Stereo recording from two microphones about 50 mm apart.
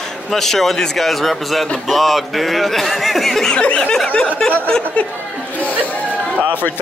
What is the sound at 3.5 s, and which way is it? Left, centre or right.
Speech, left.